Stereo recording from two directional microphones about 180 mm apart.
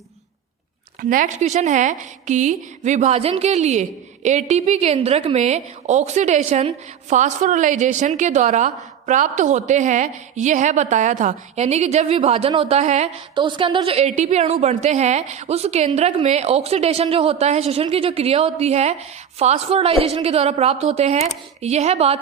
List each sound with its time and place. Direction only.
1.1 s a woman's voice: 45° right (ahead or behind)
13.3 s a woman's voice: 25° right (ahead or behind)